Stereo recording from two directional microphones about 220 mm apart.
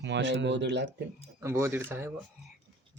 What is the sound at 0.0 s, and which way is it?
Speech, 55° right (ahead or behind).